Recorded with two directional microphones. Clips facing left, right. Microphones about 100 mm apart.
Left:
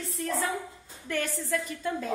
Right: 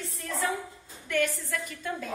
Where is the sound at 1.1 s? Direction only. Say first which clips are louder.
Right 2 dB; 30° left (ahead or behind).